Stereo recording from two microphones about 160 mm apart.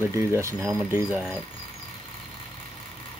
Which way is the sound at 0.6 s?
5° right (ahead or behind).